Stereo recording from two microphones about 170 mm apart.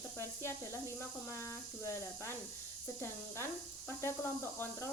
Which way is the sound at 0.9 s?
15° left (ahead or behind).